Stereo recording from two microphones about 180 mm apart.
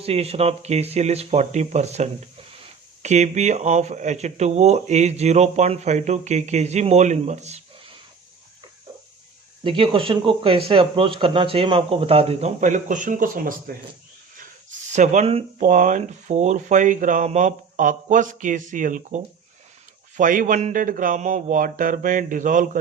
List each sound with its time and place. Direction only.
0.0 s speech: 35° right (ahead or behind)
9.6 s speech: 30° right (ahead or behind); by 13.7 s 50° right (ahead or behind)
14.9 s speech: 40° right (ahead or behind)